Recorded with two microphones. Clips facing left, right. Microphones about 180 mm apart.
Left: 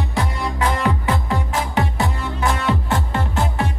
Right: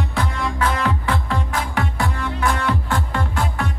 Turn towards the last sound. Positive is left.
turn(degrees=20)  # may be behind; listen again after turning